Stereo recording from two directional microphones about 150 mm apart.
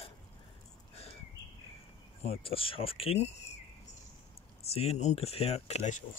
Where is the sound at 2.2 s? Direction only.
40° left (ahead or behind).